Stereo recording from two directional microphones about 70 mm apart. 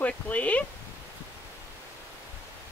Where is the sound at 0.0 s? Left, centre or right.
Centre.